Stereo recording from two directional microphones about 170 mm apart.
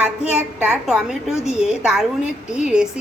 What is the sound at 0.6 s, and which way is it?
A woman's voice, 5° right (ahead or behind).